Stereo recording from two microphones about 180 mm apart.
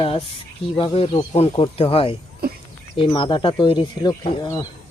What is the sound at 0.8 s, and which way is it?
Speech, 30° left (ahead or behind).